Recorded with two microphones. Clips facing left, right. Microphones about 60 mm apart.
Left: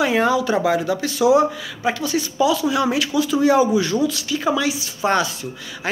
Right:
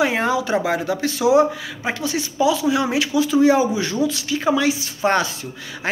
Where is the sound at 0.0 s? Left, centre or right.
Right.